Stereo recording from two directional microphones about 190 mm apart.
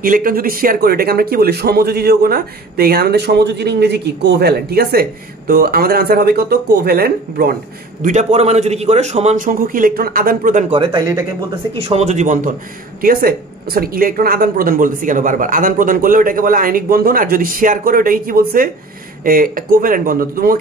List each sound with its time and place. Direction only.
0.0 s speech: 50° right (ahead or behind)
8.0 s a man's voice: 40° right (ahead or behind)
10.7 s speech: 25° right (ahead or behind)
11.8 s a man's voice: 35° right (ahead or behind)
13.0 s speech: 50° right (ahead or behind)